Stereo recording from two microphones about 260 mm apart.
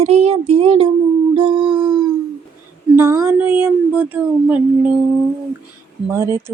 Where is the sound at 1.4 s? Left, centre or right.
Centre.